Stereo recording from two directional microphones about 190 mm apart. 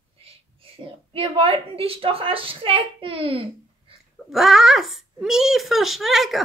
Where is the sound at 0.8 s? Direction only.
30° right (ahead or behind).